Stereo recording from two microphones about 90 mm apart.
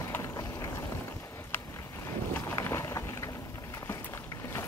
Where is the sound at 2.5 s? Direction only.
35° left (ahead or behind).